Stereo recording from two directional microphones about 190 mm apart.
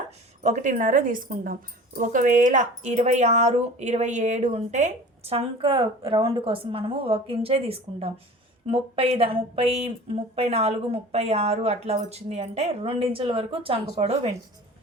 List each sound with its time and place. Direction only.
0.4 s a woman's voice: 40° right (ahead or behind)